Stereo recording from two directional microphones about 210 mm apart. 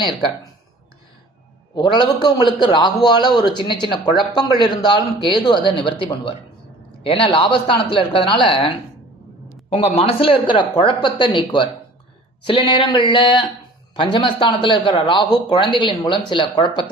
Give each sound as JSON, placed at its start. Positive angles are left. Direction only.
{"t": 1.7, "sound": "a man's voice", "side_deg": 20}
{"t": 9.7, "sound": "a man's voice", "side_deg": 30}